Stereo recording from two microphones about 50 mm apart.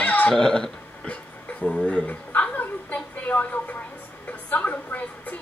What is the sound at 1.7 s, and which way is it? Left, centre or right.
Speech, centre.